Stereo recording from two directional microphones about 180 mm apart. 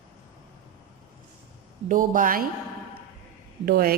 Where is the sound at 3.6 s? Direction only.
55° right (ahead or behind).